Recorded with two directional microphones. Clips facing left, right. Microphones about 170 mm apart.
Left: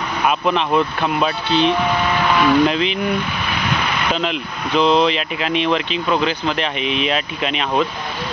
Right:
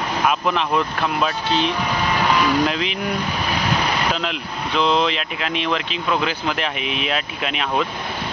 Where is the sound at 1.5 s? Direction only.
40° right (ahead or behind).